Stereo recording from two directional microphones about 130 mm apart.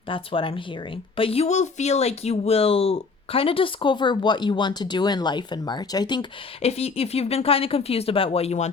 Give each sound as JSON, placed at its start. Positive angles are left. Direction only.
{"t": 0.1, "sound": "speech", "side_deg": 40}
{"t": 6.6, "sound": "speech", "side_deg": 50}